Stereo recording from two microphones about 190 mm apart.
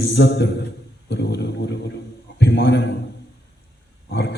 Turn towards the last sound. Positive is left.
turn(degrees=55)  # may be behind; listen again after turning